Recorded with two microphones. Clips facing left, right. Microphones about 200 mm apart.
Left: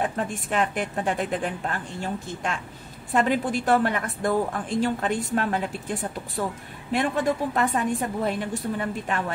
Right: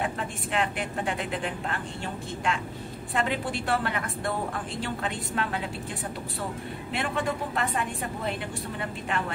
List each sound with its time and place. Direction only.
0.0 s a woman's voice: 45° left (ahead or behind)
6.9 s a woman's voice: 45° left (ahead or behind)